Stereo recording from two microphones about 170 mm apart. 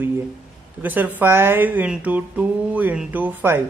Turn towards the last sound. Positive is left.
turn(degrees=-10)  # may be behind; listen again after turning